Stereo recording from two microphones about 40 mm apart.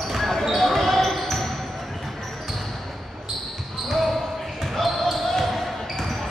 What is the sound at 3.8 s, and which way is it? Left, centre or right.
Basketball bounce, centre.